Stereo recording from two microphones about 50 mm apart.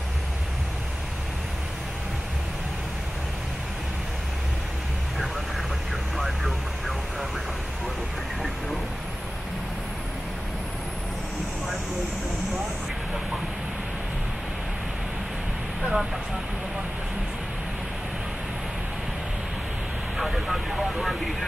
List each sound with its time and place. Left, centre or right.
6.1 s vehicle: centre
15.8 s vehicle: centre
20.2 s vehicle: centre